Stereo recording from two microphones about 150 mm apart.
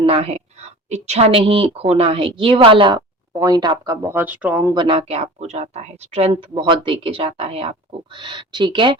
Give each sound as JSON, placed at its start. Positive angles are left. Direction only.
{"t": 0.0, "sound": "a woman's voice", "side_deg": -40}
{"t": 4.1, "sound": "speech", "side_deg": -10}
{"t": 4.7, "sound": "speech", "side_deg": -35}